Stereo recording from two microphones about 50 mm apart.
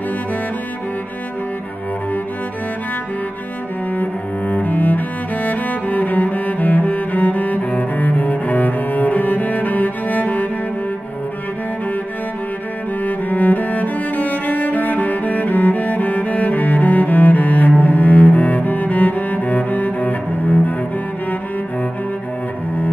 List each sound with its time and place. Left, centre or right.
3.9 s cello: left
13.0 s cello: left